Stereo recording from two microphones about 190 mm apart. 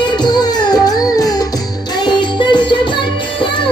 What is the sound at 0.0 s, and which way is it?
Music, 20° left (ahead or behind).